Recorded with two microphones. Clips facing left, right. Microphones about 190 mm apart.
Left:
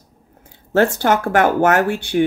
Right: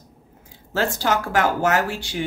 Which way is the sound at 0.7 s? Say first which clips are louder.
Left 7 dB; 60° left (ahead or behind).